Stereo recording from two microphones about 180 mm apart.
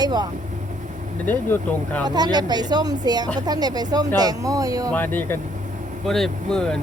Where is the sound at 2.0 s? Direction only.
20° right (ahead or behind).